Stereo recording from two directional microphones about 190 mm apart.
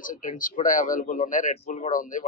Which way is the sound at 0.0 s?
45° left (ahead or behind).